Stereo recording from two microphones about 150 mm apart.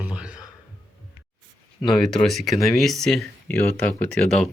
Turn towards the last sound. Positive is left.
turn(degrees=5)  # may be behind; listen again after turning